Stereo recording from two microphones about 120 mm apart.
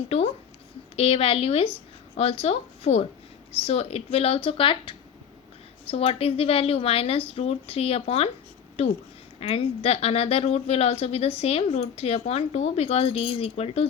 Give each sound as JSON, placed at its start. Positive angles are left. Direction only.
{"t": 0.1, "sound": "a sound", "side_deg": 60}
{"t": 0.9, "sound": "a woman's voice", "side_deg": 55}
{"t": 9.4, "sound": "speech", "side_deg": 55}